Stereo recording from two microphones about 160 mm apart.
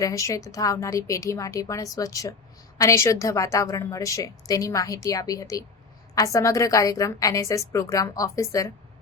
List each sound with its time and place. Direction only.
0.0 s a woman's voice: 20° left (ahead or behind)